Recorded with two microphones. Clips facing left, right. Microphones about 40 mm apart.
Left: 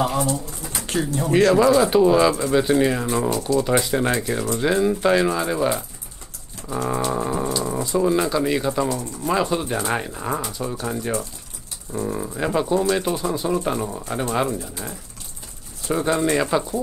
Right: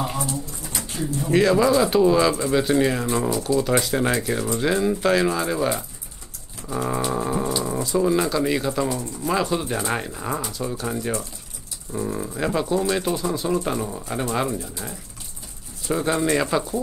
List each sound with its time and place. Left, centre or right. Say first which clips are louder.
0.0 s speech: left 5 dB; left
1.7 s speech: left 2 dB; centre
6.8 s a sound: left 1 dB; centre
7.1 s speech: left 1 dB; centre
15.9 s speech: left 1 dB; centre